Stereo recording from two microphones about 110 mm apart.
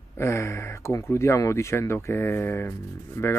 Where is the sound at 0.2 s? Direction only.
25° left (ahead or behind).